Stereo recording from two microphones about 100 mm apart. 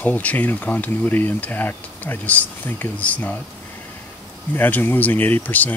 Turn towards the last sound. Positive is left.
turn(degrees=15)  # may be behind; listen again after turning